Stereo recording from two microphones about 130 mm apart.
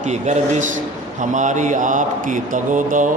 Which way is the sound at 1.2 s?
75° right (ahead or behind).